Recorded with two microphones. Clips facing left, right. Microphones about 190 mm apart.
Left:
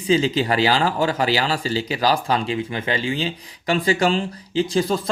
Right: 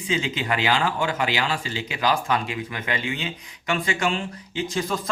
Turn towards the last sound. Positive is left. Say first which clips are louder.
# left 6 dB
turn(degrees=35)  # may be behind; listen again after turning